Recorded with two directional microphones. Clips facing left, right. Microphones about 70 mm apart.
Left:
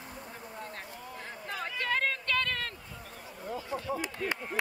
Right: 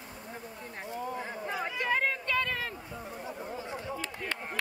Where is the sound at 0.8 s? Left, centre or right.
Centre.